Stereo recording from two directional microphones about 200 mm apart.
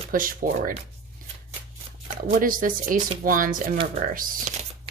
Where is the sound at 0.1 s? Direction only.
45° right (ahead or behind).